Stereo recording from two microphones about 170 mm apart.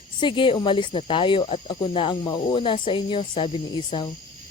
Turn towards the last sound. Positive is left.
turn(degrees=30)  # may be behind; listen again after turning